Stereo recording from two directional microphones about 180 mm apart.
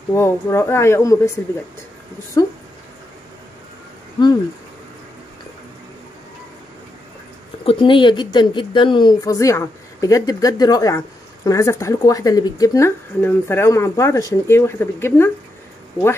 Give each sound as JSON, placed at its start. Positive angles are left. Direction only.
{"t": 0.1, "sound": "speech", "side_deg": 15}
{"t": 7.6, "sound": "speech", "side_deg": 25}